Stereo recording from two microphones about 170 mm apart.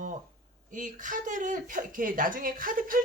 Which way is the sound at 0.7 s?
50° right (ahead or behind).